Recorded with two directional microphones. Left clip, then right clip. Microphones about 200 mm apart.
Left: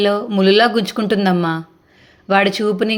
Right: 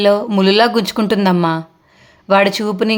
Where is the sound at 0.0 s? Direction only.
10° right (ahead or behind).